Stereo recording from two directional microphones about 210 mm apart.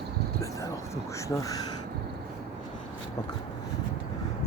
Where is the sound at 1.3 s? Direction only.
15° left (ahead or behind).